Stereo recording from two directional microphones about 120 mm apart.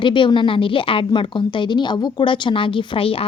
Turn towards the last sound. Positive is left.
turn(degrees=50)  # may be behind; listen again after turning